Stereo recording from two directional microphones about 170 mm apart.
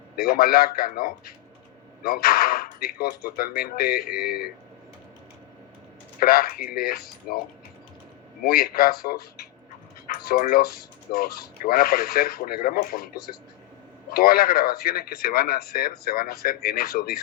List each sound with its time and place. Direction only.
0.2 s speech: 60° left (ahead or behind)
6.1 s speech: 60° left (ahead or behind)
8.4 s speech: 60° left (ahead or behind)